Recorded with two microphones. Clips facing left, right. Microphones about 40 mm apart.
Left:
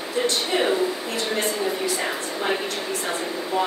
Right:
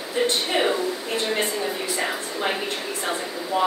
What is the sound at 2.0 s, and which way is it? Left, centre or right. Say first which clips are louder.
Speech: even; centre.